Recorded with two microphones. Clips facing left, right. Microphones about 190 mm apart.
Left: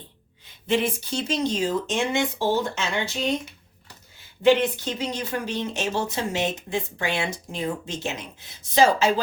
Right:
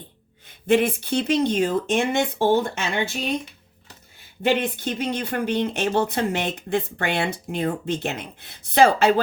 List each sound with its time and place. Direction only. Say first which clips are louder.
0.4 s speech: right 5 dB; 55° right (ahead or behind)
4.4 s speech: left 3 dB; 55° right (ahead or behind)